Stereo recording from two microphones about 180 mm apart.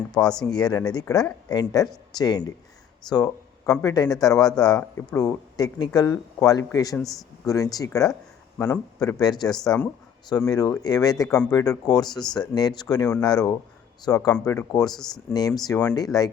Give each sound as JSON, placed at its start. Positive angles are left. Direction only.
{"t": 0.1, "sound": "speech", "side_deg": 5}
{"t": 0.5, "sound": "speech", "side_deg": 20}
{"t": 3.7, "sound": "speech", "side_deg": 20}
{"t": 9.6, "sound": "speech", "side_deg": 5}
{"t": 10.2, "sound": "speech", "side_deg": 20}